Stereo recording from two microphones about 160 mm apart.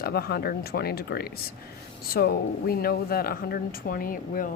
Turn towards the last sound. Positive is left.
turn(degrees=60)  # may be behind; listen again after turning